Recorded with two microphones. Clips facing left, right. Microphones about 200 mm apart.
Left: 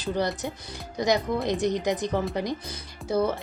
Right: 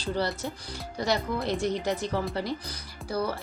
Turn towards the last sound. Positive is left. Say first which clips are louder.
# left 5 dB
turn(degrees=25)  # may be behind; listen again after turning